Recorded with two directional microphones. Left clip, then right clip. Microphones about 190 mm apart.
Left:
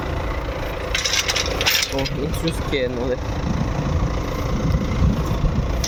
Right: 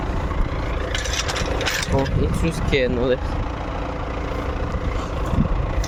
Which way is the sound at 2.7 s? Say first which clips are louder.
Right 4 dB; 25° right (ahead or behind).